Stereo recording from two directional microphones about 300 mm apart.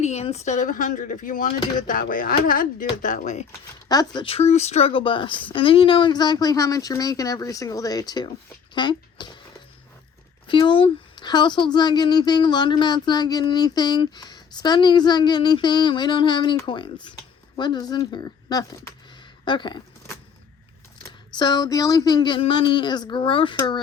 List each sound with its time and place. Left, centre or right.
0.0 s speech: left
3.8 s a woman's voice: centre
10.4 s a woman's voice: centre
19.5 s a sound: centre
21.3 s a woman's voice: centre